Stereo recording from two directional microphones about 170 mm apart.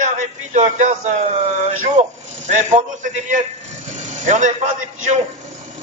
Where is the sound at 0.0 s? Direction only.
45° right (ahead or behind).